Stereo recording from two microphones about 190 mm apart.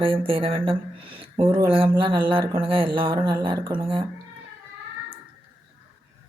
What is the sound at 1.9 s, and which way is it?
Speech, 25° right (ahead or behind).